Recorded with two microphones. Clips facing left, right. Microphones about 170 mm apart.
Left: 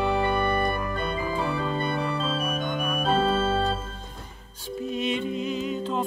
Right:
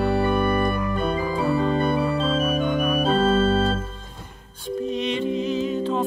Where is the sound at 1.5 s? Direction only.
45° right (ahead or behind).